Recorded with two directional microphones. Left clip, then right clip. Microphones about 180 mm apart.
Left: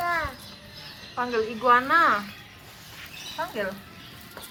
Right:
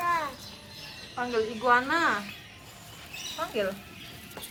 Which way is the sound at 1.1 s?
5° right (ahead or behind).